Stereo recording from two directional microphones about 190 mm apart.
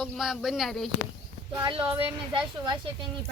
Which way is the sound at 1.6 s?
25° right (ahead or behind).